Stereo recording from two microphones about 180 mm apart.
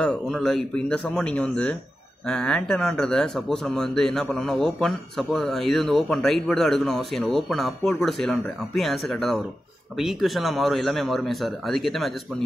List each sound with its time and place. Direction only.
0.0 s speech: 5° left (ahead or behind)